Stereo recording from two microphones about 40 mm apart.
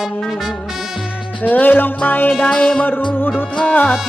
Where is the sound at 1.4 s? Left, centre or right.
Left.